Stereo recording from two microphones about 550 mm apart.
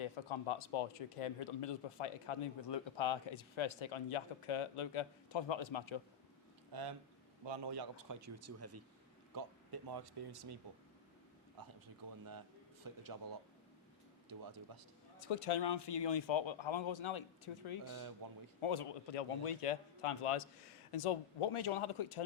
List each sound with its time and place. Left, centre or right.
0.0 s speech: left
6.7 s speech: right
9.3 s speech: right
12.0 s speech: right
15.2 s a man's voice: left